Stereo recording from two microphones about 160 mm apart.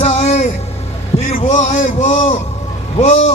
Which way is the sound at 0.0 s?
45° left (ahead or behind).